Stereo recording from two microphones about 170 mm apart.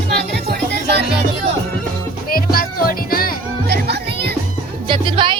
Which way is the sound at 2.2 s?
60° left (ahead or behind).